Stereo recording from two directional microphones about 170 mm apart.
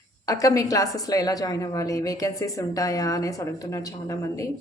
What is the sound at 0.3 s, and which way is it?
A woman's voice, 20° left (ahead or behind).